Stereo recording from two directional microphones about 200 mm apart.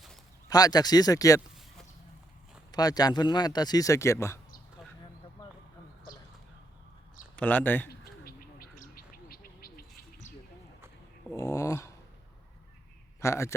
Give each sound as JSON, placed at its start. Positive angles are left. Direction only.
{"t": 0.4, "sound": "speech", "side_deg": 20}
{"t": 2.7, "sound": "speech", "side_deg": 20}
{"t": 5.4, "sound": "a sound", "side_deg": 20}
{"t": 7.3, "sound": "speech", "side_deg": 10}
{"t": 7.9, "sound": "bird", "side_deg": 50}
{"t": 11.3, "sound": "speech", "side_deg": 15}
{"t": 13.1, "sound": "speech", "side_deg": 15}